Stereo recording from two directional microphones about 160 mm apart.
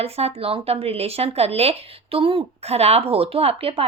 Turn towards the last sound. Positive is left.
turn(degrees=-35)  # may be behind; listen again after turning